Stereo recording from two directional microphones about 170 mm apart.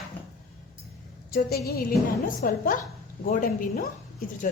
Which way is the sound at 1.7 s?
60° left (ahead or behind).